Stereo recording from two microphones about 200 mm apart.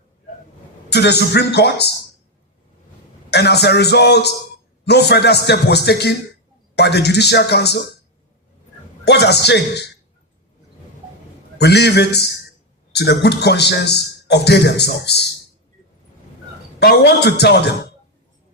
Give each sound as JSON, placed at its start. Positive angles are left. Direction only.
{"t": 0.9, "sound": "a man's voice", "side_deg": 55}
{"t": 3.2, "sound": "a man's voice", "side_deg": 55}
{"t": 9.0, "sound": "a man's voice", "side_deg": 55}
{"t": 11.5, "sound": "a man's voice", "side_deg": 55}
{"t": 16.8, "sound": "a man's voice", "side_deg": 55}